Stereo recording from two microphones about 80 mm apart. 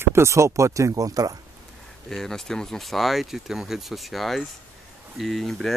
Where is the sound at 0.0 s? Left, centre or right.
Right.